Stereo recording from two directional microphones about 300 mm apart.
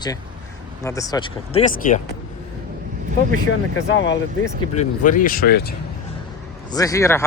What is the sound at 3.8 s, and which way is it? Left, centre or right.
Speech, left.